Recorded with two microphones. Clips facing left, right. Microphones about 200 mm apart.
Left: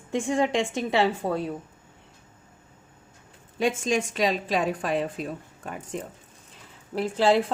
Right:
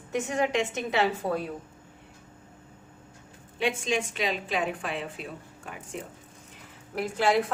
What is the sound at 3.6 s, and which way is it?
A woman's voice, 45° left (ahead or behind).